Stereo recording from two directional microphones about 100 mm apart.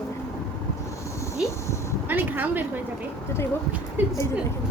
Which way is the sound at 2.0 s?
20° right (ahead or behind).